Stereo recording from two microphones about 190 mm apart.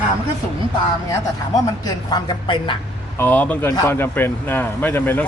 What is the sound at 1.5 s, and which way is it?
Speech, 20° left (ahead or behind).